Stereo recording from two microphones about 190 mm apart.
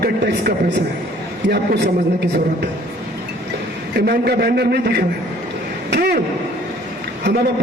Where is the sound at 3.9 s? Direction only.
55° right (ahead or behind).